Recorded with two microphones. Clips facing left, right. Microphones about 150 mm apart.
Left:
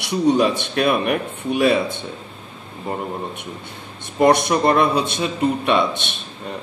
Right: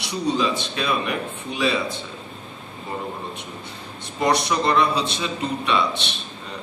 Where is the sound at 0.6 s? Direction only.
55° left (ahead or behind).